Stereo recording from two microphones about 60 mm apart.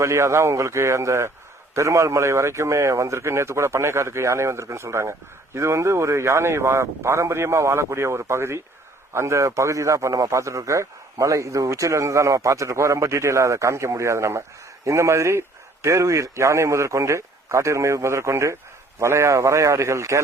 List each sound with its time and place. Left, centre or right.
0.0 s a man's voice: right